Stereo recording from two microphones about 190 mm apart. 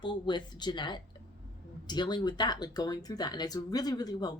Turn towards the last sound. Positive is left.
turn(degrees=20)  # may be behind; listen again after turning